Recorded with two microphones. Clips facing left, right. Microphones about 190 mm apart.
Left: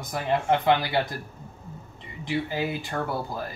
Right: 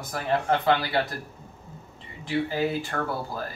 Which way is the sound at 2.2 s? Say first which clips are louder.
Right 2 dB; 15° left (ahead or behind).